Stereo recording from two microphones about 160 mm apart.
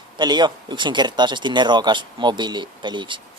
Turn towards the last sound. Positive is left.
turn(degrees=-30)  # may be behind; listen again after turning